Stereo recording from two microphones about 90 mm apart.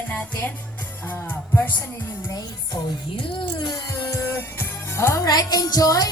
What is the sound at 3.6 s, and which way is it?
Music, 50° left (ahead or behind).